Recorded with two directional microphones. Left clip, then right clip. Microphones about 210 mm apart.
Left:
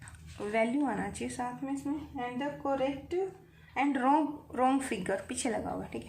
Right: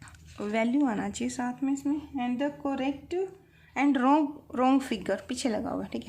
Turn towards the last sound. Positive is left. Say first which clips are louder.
# right 3 dB
turn(degrees=-40)  # may be behind; listen again after turning